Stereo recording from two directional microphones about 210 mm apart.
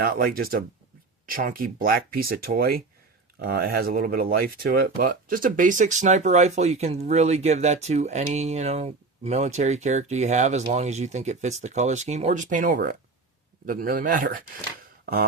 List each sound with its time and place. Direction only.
0.0 s speech: 45° right (ahead or behind)